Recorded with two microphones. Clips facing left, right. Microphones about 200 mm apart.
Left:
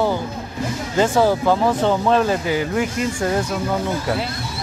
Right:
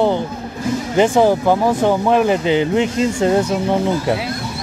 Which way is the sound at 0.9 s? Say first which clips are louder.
Right 3 dB; 20° right (ahead or behind).